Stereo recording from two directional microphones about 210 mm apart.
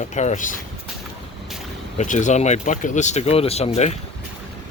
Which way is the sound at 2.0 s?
35° left (ahead or behind).